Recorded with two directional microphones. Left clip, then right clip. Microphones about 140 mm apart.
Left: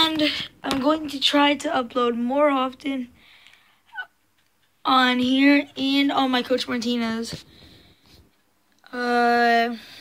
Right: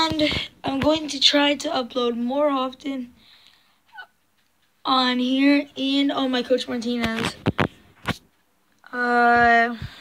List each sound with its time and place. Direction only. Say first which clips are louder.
0.0 s speech: even; 5° right (ahead or behind); by 7.3 s 15° left (ahead or behind)
8.8 s speech: right 2 dB; 20° left (ahead or behind)